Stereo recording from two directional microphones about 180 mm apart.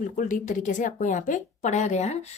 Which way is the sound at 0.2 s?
45° left (ahead or behind).